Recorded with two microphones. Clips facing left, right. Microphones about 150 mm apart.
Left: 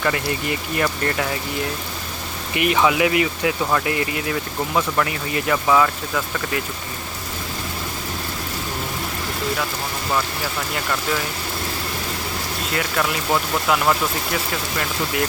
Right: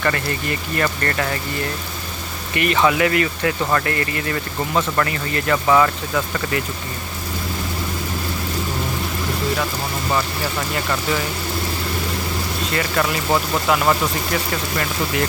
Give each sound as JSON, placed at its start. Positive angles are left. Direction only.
{"t": 0.0, "sound": "speech", "side_deg": 5}
{"t": 2.6, "sound": "speech", "side_deg": 10}
{"t": 12.7, "sound": "speech", "side_deg": 0}